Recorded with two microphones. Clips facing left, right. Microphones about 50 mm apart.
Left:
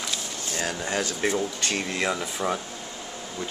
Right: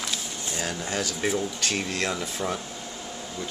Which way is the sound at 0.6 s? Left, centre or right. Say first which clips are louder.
Left 2 dB; left.